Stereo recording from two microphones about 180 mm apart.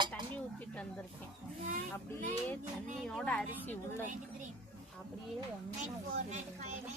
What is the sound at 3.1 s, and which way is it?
Speech, 5° left (ahead or behind).